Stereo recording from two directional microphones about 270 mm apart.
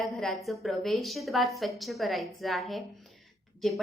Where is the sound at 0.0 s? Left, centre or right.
Centre.